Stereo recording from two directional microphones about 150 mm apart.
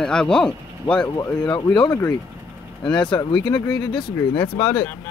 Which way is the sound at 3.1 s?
30° left (ahead or behind).